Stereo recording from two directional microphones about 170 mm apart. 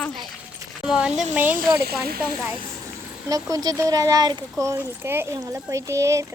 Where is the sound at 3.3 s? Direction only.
20° right (ahead or behind).